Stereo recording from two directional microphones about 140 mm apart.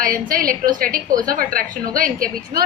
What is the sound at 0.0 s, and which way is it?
A woman's voice, 90° right.